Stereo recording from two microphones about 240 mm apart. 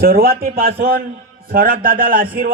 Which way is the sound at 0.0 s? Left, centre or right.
Right.